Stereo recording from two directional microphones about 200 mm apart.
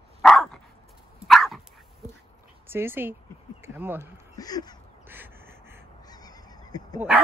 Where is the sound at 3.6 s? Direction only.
10° right (ahead or behind).